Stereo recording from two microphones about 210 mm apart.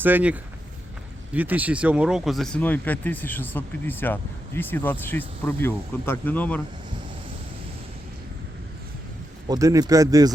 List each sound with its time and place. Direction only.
0.0 s speech: 10° right (ahead or behind); by 6.6 s 10° left (ahead or behind)
9.5 s speech: 15° right (ahead or behind)